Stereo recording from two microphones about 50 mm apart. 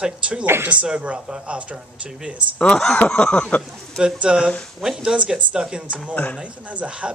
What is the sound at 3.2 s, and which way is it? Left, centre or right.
Speech, left.